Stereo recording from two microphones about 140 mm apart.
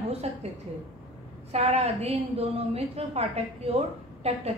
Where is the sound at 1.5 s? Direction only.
50° right (ahead or behind).